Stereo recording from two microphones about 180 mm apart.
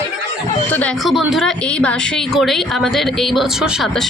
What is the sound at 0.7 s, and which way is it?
A woman's voice, 10° left (ahead or behind).